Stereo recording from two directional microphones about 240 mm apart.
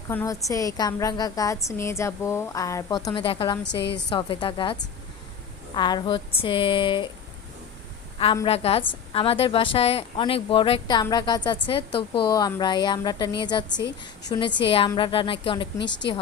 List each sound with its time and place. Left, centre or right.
0.1 s a woman's voice: centre
3.6 s a woman's voice: left
4.1 s speech: left
8.2 s speech: left